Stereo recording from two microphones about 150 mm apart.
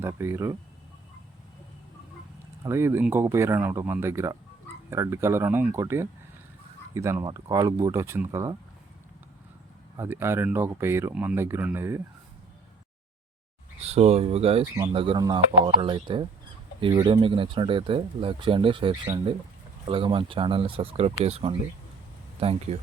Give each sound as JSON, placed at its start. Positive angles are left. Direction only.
{"t": 0.0, "sound": "speech", "side_deg": -15}
{"t": 2.6, "sound": "speech", "side_deg": -15}
{"t": 10.0, "sound": "speech", "side_deg": -15}
{"t": 13.8, "sound": "speech", "side_deg": -45}